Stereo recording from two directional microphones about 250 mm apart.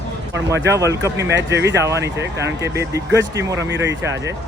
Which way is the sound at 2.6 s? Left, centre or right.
Centre.